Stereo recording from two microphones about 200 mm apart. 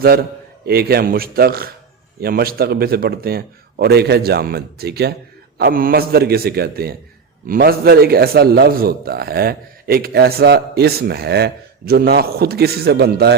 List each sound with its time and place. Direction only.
0.0 s a man's voice: 50° right (ahead or behind)